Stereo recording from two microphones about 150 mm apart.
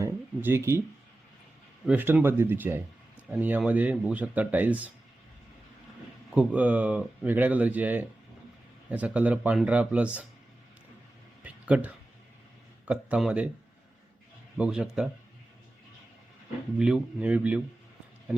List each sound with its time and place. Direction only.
0.0 s a sound: 15° right (ahead or behind)
1.9 s speech: 10° right (ahead or behind)
6.3 s speech: 10° right (ahead or behind)
11.4 s a sound: 10° right (ahead or behind)
12.8 s speech: 10° right (ahead or behind)
14.6 s speech: 5° right (ahead or behind)
16.7 s speech: 5° right (ahead or behind)